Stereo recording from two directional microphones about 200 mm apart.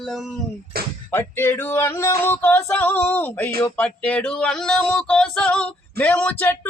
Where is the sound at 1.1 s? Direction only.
10° left (ahead or behind).